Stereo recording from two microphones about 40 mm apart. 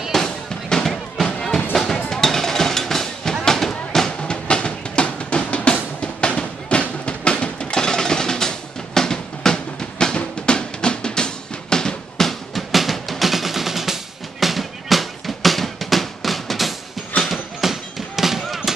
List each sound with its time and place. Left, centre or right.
0.1 s music: centre
2.0 s a sound: centre
4.2 s drum: left
5.9 s music: left
12.2 s drum: centre
14.4 s music: centre
17.2 s a sound: centre